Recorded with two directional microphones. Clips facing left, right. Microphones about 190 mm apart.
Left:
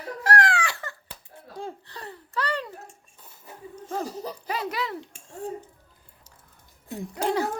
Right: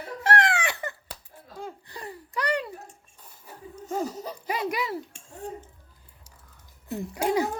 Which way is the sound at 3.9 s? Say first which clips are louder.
Right 1 dB; 10° right (ahead or behind).